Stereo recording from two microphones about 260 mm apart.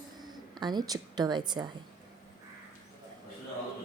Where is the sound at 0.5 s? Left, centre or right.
Centre.